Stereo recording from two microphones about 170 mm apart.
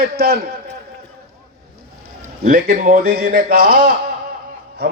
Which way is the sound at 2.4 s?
60° right (ahead or behind).